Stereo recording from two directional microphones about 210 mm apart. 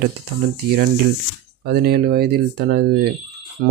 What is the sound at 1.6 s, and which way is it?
Speech, 50° right (ahead or behind).